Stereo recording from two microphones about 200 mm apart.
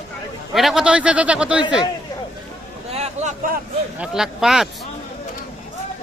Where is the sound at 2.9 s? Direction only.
30° right (ahead or behind).